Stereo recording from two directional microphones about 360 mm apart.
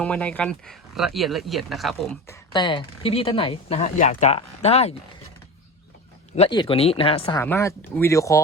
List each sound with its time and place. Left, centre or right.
0.0 s speech: centre
2.5 s speech: centre
6.3 s speech: centre